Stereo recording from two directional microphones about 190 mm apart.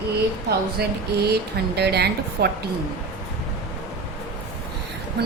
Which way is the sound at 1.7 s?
60° right (ahead or behind).